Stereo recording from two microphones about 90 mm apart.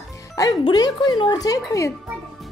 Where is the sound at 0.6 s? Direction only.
55° left (ahead or behind).